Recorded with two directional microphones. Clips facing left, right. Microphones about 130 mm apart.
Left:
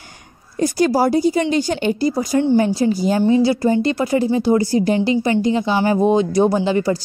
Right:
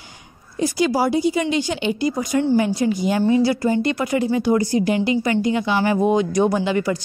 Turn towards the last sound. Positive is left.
turn(degrees=30)  # may be behind; listen again after turning